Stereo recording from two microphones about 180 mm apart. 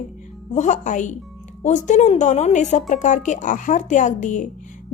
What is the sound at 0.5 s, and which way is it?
A woman's voice, 45° left (ahead or behind).